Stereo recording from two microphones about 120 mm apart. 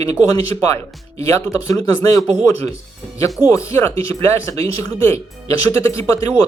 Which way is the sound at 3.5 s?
25° left (ahead or behind).